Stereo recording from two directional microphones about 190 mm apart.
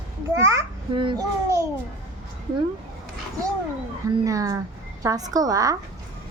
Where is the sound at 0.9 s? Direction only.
25° right (ahead or behind).